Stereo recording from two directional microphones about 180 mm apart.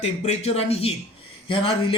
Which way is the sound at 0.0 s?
40° left (ahead or behind).